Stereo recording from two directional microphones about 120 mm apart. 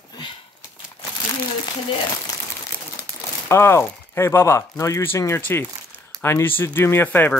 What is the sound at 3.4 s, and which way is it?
Speech, 20° left (ahead or behind).